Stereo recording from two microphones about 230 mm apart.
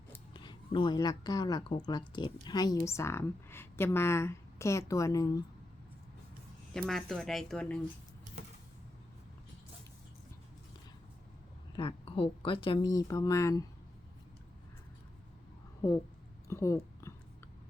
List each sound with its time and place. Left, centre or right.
0.3 s speech: left
6.7 s speech: centre
11.7 s speech: left
16.5 s a sound: centre